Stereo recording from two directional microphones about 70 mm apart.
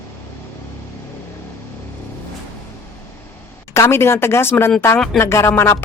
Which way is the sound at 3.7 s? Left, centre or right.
Left.